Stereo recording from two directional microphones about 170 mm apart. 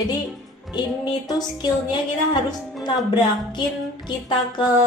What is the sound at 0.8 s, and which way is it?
A woman's voice, 25° left (ahead or behind).